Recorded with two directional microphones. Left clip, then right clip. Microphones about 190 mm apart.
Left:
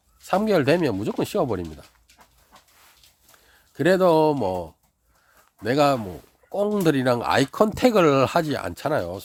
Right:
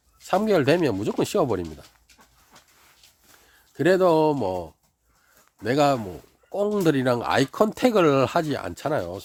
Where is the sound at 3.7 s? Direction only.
10° left (ahead or behind).